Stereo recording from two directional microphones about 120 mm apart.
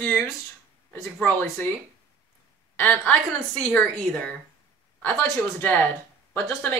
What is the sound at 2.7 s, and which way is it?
A woman's voice, 15° left (ahead or behind).